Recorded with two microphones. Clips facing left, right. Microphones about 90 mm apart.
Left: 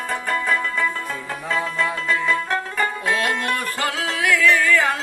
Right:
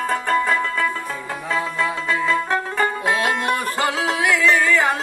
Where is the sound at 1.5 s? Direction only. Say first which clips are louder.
Right 1 dB; 5° right (ahead or behind).